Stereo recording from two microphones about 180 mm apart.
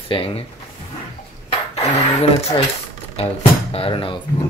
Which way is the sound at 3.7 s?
30° left (ahead or behind).